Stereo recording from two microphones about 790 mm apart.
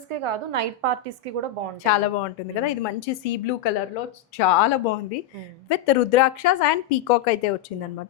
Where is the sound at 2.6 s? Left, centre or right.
Left.